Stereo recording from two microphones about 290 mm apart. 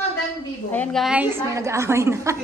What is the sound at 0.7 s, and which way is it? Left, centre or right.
A woman's voice, centre.